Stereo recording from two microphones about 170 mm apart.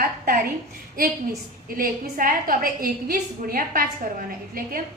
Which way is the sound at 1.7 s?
55° right (ahead or behind).